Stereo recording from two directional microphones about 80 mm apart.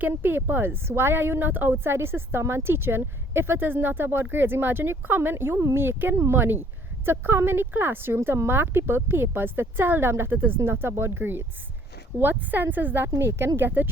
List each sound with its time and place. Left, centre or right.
0.0 s a woman's voice: right